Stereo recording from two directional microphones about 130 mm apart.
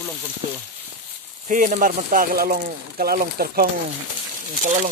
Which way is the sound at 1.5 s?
85° right.